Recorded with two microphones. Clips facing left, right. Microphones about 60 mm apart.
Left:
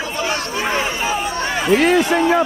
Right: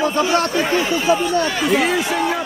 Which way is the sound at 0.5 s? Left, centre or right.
Left.